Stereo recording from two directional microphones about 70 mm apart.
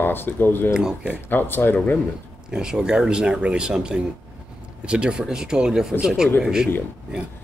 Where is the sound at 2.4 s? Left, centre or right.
Centre.